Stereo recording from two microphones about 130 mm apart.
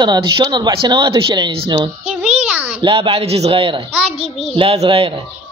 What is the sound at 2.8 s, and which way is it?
A man's voice, 40° right (ahead or behind).